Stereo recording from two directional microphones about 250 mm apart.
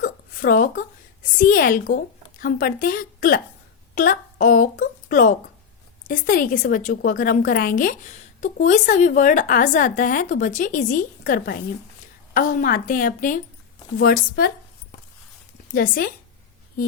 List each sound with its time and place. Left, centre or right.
0.0 s a woman's voice: left
15.7 s a woman's voice: left